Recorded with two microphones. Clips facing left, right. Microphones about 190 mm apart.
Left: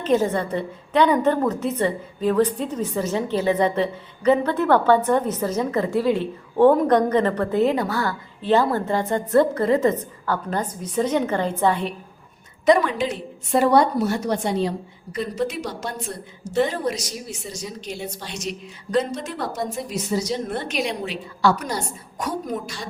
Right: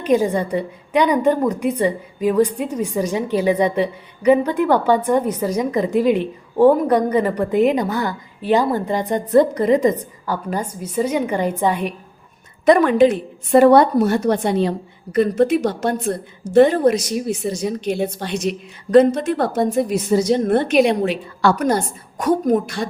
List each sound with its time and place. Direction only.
0.0 s a woman's voice: 15° right (ahead or behind)
12.6 s a woman's voice: 55° right (ahead or behind)